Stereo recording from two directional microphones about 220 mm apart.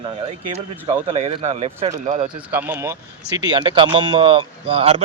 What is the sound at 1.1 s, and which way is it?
Speech, 30° right (ahead or behind).